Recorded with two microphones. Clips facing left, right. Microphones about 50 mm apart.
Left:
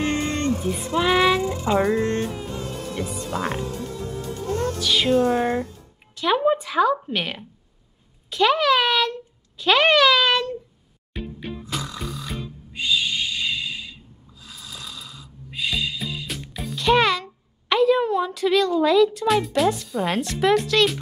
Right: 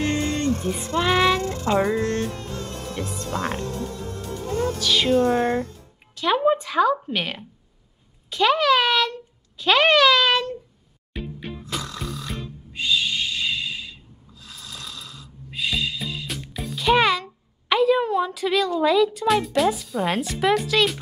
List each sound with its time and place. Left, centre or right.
0.0 s a sound: centre
0.5 s speech: centre
2.0 s music: left
2.2 s music: centre
6.1 s a woman's voice: centre
11.1 s music: centre